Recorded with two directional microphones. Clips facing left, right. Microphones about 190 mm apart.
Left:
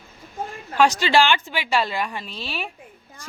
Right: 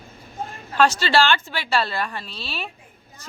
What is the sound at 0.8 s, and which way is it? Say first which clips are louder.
A woman's voice: left 1 dB; 15° left (ahead or behind).